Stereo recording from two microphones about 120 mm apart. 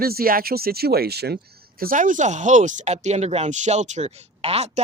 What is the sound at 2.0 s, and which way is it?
Speech, 90° right.